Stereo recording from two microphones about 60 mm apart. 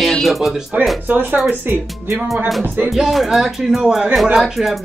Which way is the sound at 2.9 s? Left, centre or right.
Centre.